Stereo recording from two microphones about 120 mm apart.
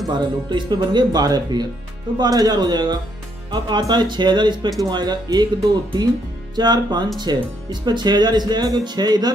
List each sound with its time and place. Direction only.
0.0 s speech: 40° right (ahead or behind)
6.5 s speech: 35° right (ahead or behind)